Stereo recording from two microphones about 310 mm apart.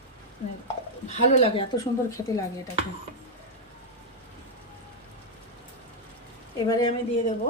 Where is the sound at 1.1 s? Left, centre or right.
Left.